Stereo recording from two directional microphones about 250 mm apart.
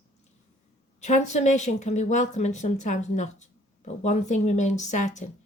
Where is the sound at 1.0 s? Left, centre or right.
Left.